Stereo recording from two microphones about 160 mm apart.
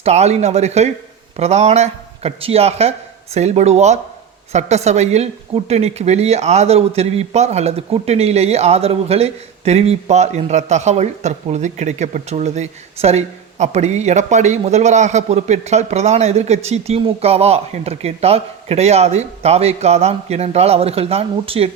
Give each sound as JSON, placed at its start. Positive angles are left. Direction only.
{"t": 0.0, "sound": "a woman's voice", "side_deg": -45}